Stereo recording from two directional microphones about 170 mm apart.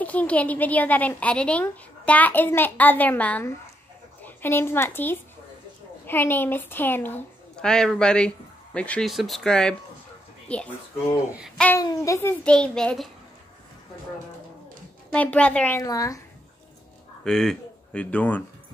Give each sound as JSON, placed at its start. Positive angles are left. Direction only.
{"t": 0.0, "sound": "a woman's voice", "side_deg": 10}
{"t": 11.8, "sound": "a woman's voice", "side_deg": 20}
{"t": 15.1, "sound": "a woman's voice", "side_deg": 5}
{"t": 15.8, "sound": "speech", "side_deg": 20}
{"t": 17.2, "sound": "speech", "side_deg": 5}